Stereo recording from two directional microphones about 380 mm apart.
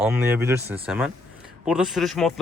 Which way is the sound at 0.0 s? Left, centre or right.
Centre.